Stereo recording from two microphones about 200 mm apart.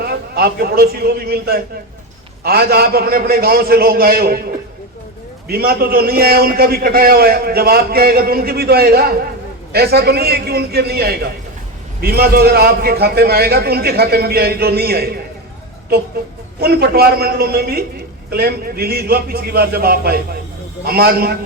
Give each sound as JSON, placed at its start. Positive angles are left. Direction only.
{"t": 0.0, "sound": "a man's voice", "side_deg": -50}
{"t": 5.5, "sound": "a man's voice", "side_deg": -50}
{"t": 16.6, "sound": "a man's voice", "side_deg": -50}